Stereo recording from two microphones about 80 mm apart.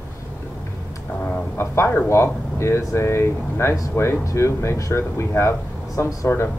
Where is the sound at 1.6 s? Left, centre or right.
Left.